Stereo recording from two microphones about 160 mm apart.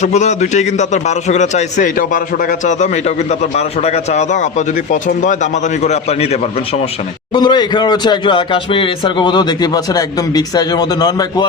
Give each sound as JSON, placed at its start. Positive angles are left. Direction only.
{"t": 0.0, "sound": "a man's voice", "side_deg": 45}
{"t": 7.3, "sound": "speech", "side_deg": 25}